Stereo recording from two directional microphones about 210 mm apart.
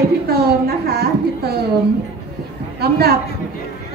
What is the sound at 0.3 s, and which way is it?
Speech, 50° right (ahead or behind).